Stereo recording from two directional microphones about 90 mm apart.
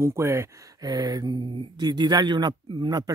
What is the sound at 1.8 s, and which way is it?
Speech, 50° right (ahead or behind).